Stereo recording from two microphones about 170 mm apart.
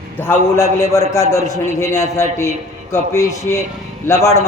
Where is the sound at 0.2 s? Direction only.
15° left (ahead or behind).